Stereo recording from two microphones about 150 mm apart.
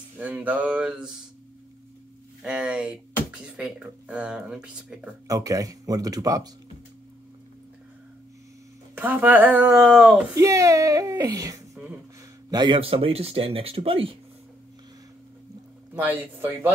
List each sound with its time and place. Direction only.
0.2 s speech: 10° right (ahead or behind)
2.4 s speech: 5° right (ahead or behind)
5.3 s speech: 20° right (ahead or behind)
8.9 s speech: 10° right (ahead or behind)
10.3 s speech: 20° right (ahead or behind); by 14.1 s 40° right (ahead or behind)
15.9 s speech: 10° right (ahead or behind)